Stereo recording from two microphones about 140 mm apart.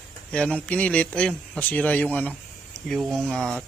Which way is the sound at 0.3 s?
10° left (ahead or behind).